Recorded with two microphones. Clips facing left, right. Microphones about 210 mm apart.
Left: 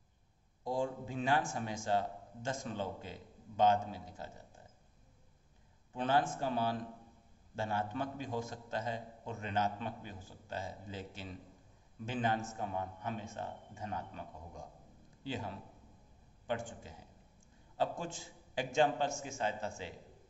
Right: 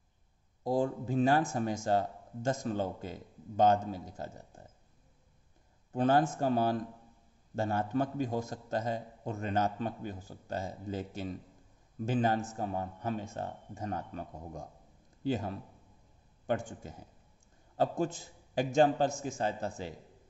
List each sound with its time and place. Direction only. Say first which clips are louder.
0.8 s a man's voice: right 7 dB; 40° right (ahead or behind)
5.9 s a man's voice: right 5 dB; 45° right (ahead or behind)